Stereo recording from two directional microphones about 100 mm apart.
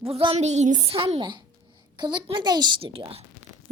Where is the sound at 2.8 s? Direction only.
65° right (ahead or behind).